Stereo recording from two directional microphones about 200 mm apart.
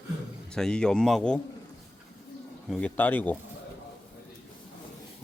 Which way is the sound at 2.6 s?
5° left (ahead or behind).